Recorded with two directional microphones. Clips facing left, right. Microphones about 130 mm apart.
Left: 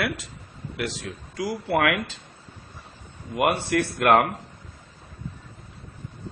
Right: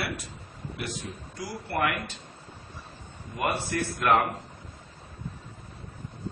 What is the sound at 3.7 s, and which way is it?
Speech, 65° left (ahead or behind).